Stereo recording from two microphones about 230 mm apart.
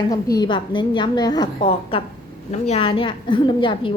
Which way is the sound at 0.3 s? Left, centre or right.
Centre.